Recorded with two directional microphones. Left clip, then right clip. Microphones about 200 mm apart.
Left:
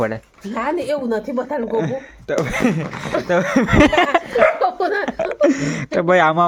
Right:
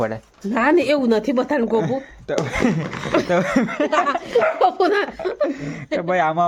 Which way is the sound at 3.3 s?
Centre (ahead or behind).